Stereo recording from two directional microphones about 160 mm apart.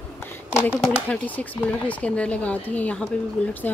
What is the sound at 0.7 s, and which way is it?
Speech, centre (ahead or behind).